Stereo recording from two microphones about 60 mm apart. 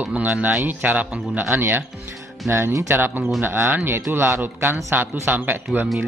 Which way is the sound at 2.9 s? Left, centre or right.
Right.